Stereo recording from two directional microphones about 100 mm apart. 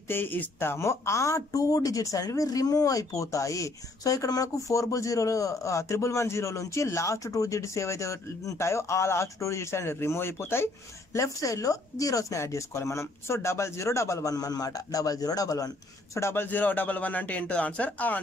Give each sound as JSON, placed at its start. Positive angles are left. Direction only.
{"t": 0.1, "sound": "speech", "side_deg": 20}
{"t": 16.2, "sound": "a man's voice", "side_deg": 25}